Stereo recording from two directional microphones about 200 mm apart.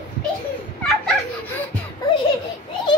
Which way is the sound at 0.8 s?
5° left (ahead or behind).